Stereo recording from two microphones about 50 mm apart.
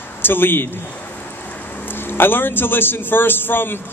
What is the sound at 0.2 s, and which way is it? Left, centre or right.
A man's voice, left.